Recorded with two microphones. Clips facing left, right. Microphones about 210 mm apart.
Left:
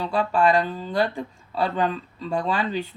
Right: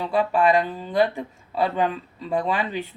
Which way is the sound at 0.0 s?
15° right (ahead or behind).